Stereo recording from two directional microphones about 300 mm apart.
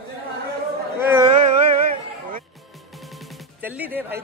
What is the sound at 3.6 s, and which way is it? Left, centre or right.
Speech, centre.